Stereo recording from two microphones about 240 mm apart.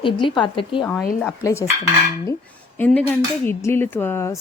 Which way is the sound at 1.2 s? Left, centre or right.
Centre.